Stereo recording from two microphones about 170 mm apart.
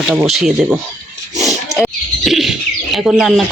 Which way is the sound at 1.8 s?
Centre (ahead or behind).